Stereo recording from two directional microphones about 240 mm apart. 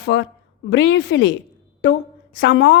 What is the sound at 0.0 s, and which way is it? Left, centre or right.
A woman's voice, left.